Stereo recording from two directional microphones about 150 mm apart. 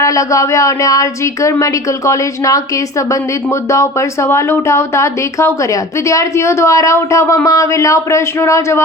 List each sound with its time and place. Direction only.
0.0 s speech: 20° left (ahead or behind)